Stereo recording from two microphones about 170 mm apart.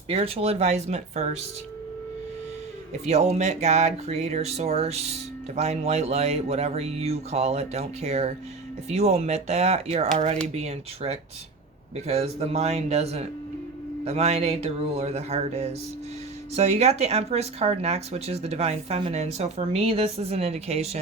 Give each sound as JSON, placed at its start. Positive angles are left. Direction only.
{"t": 0.1, "sound": "speech", "side_deg": -35}
{"t": 3.1, "sound": "speech", "side_deg": -40}